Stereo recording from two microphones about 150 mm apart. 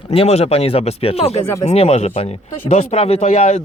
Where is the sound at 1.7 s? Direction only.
45° left (ahead or behind).